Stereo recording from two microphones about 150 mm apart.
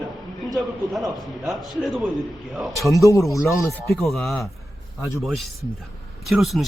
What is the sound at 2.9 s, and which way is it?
Speech, 20° left (ahead or behind).